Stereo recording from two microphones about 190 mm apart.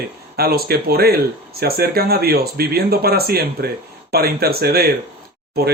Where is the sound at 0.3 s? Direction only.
55° right (ahead or behind).